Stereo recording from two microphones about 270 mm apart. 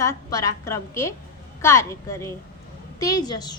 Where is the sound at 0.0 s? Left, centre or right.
Centre.